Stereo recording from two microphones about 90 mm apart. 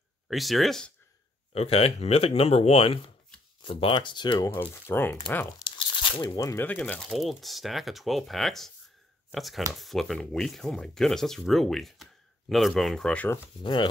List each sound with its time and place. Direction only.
0.3 s speech: centre (ahead or behind)
1.5 s speech: 90° left
3.6 s speech: 75° left (ahead or behind); by 4.4 s 60° left (ahead or behind)
4.8 s speech: 25° left (ahead or behind)
5.6 s crunch: 65° left (ahead or behind)
6.3 s speech: 35° left (ahead or behind)
6.6 s speech: 15° left (ahead or behind)
7.1 s speech: centre (ahead or behind)
13.6 s speech: 65° left (ahead or behind)